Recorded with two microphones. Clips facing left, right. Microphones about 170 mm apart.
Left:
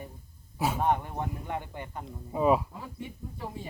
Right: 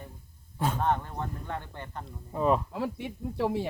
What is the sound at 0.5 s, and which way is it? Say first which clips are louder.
Speech: left 1 dB; 10° left (ahead or behind).